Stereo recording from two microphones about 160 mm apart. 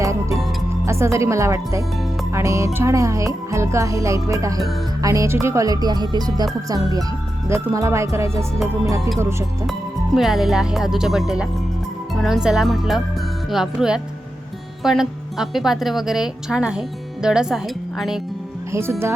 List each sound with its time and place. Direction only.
0.9 s speech: 15° right (ahead or behind)
10.2 s a woman's voice: centre (ahead or behind)
18.7 s speech: 15° right (ahead or behind)